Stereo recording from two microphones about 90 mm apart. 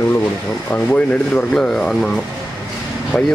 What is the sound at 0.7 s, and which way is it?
Speech, 15° left (ahead or behind).